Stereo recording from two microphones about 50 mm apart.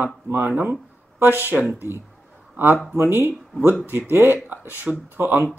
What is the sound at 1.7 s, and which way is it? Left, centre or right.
Speech, right.